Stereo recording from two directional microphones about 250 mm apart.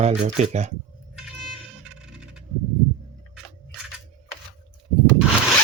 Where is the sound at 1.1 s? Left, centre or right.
Centre.